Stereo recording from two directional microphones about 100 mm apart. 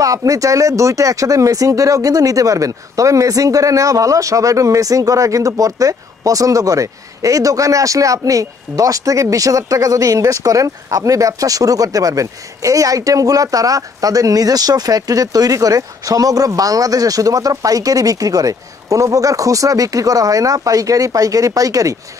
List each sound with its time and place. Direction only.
0.0 s speech: 35° right (ahead or behind)